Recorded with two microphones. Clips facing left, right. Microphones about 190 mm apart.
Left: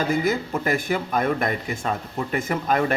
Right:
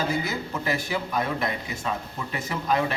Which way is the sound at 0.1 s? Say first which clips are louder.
Left 6 dB; 50° left (ahead or behind).